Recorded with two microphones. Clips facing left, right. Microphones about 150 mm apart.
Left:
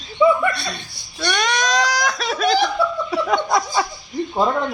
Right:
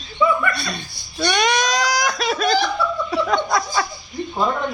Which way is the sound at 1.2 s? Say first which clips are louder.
Right 2 dB; 5° right (ahead or behind).